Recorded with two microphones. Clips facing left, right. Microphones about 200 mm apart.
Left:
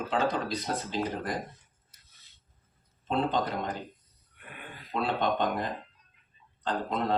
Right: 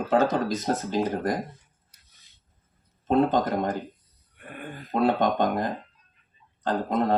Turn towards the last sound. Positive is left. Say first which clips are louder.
# right 5 dB
turn(degrees=-45)  # may be behind; listen again after turning